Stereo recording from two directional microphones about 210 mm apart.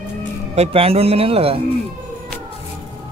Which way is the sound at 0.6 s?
30° right (ahead or behind).